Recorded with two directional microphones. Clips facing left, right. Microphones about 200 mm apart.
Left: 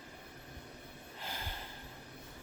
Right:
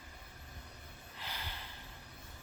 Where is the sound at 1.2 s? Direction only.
45° left (ahead or behind).